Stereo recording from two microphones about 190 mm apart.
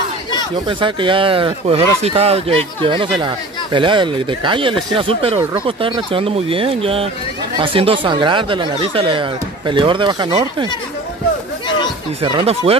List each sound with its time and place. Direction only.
0.7 s speech: 25° right (ahead or behind)
12.2 s speech: 30° right (ahead or behind)